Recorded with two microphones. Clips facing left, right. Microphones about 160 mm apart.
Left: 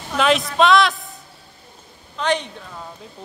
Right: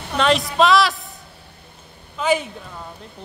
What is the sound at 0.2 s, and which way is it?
Speech, centre (ahead or behind).